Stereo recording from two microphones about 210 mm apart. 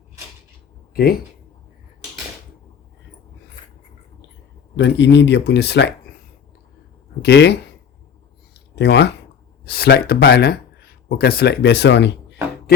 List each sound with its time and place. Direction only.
4.8 s speech: 55° left (ahead or behind)
7.2 s speech: 55° left (ahead or behind)
8.7 s speech: 55° left (ahead or behind)